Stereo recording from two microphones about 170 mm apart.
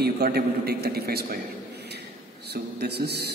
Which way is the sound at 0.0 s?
70° right (ahead or behind).